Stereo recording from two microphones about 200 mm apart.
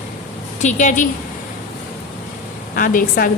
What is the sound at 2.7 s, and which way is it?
Speech, 45° left (ahead or behind).